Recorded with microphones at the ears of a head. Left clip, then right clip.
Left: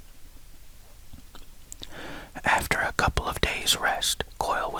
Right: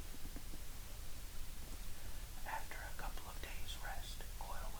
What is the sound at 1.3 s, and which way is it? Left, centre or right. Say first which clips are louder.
Whispering: left 7 dB; left.